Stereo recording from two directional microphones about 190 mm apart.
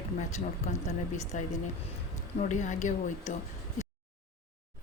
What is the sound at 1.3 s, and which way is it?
A woman's voice, 40° left (ahead or behind).